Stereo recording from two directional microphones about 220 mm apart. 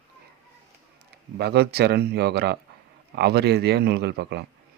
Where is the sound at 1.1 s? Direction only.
45° right (ahead or behind).